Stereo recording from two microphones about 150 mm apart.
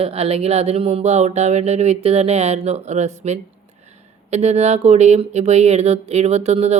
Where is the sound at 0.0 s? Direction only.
40° right (ahead or behind).